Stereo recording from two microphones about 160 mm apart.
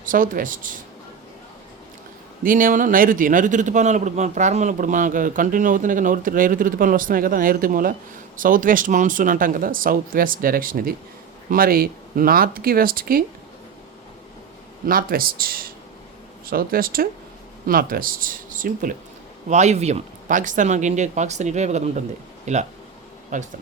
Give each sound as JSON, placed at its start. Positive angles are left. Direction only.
{"t": 0.0, "sound": "a man's voice", "side_deg": -60}
{"t": 2.4, "sound": "a man's voice", "side_deg": -60}
{"t": 14.8, "sound": "a man's voice", "side_deg": -65}
{"t": 19.5, "sound": "speech", "side_deg": -45}